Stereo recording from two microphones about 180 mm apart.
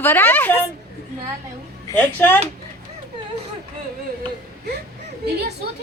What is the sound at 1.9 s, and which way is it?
Speech, 10° left (ahead or behind).